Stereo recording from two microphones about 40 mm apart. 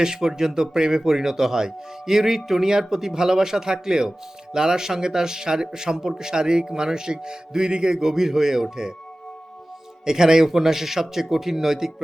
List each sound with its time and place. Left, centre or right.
0.0 s speech: centre
10.1 s speech: centre